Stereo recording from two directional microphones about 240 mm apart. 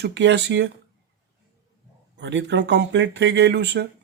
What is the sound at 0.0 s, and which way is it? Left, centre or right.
Speech, right.